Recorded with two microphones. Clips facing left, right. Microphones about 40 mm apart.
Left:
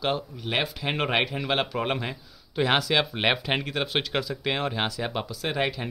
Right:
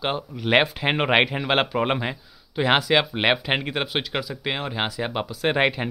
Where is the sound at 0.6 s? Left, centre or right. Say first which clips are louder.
Right 6 dB; right.